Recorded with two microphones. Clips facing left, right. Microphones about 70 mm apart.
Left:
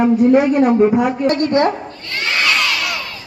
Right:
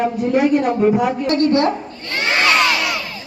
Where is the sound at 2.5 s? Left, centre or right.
Right.